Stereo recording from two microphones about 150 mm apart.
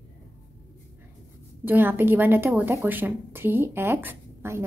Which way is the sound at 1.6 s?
10° right (ahead or behind).